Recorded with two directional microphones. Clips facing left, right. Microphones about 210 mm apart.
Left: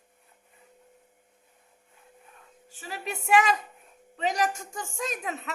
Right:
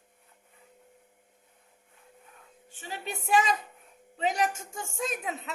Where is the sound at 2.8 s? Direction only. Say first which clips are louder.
Left 2 dB; 30° right (ahead or behind).